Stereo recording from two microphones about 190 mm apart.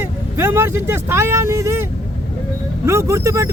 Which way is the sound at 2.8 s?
15° right (ahead or behind).